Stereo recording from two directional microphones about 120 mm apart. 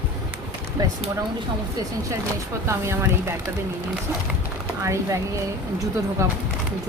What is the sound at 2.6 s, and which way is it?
Speech, 25° right (ahead or behind).